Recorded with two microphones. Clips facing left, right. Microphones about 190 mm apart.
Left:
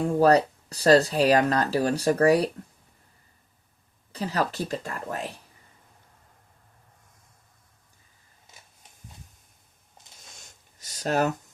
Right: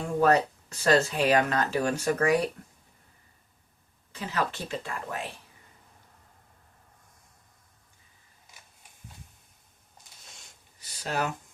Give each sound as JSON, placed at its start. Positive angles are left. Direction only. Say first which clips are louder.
{"t": 0.2, "sound": "speech", "louder": "left 3 dB", "side_deg": 35}
{"t": 4.1, "sound": "speech", "louder": "left 3 dB", "side_deg": 35}
{"t": 10.8, "sound": "a sound", "louder": "left 6 dB", "side_deg": 45}